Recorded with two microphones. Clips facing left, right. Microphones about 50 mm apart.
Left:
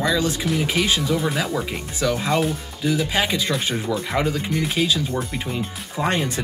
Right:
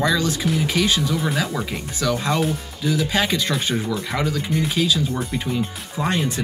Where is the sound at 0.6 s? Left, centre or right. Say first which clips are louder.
Right 1 dB; left.